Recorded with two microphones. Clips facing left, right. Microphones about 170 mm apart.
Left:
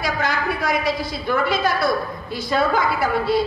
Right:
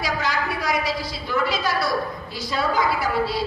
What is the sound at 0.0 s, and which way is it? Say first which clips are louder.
A woman's voice: left 2 dB; 55° left (ahead or behind).